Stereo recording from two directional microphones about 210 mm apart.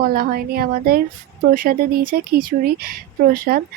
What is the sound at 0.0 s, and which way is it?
Speech, 45° right (ahead or behind).